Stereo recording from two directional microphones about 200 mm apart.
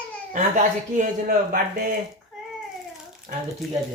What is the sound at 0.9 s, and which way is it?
Speech, 40° right (ahead or behind).